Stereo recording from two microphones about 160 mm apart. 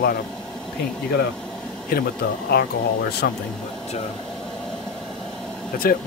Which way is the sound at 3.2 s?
75° left (ahead or behind).